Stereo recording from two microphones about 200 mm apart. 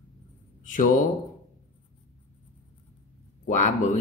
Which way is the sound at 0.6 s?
40° left (ahead or behind).